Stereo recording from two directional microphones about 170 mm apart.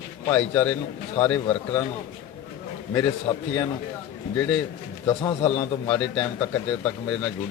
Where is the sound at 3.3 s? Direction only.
30° left (ahead or behind).